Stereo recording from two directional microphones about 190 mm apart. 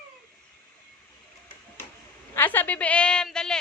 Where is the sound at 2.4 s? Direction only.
10° left (ahead or behind).